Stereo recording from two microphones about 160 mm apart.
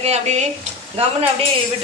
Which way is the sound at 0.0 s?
45° right (ahead or behind).